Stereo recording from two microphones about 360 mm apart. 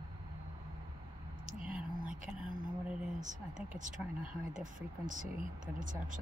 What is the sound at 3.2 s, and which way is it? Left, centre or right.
Speech, right.